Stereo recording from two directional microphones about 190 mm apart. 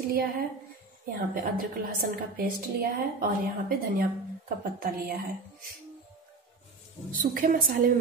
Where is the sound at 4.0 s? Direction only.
50° right (ahead or behind).